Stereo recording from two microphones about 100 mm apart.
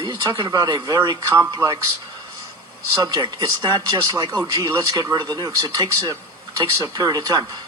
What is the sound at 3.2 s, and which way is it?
Speech, 40° right (ahead or behind).